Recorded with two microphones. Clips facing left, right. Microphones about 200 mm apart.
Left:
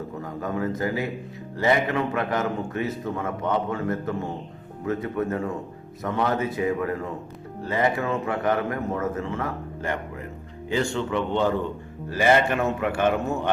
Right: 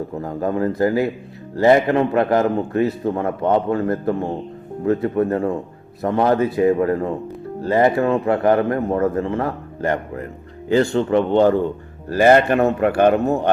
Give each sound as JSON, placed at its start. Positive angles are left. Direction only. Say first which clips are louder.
{"t": 0.2, "sound": "a man's voice", "louder": "right 7 dB", "side_deg": -35}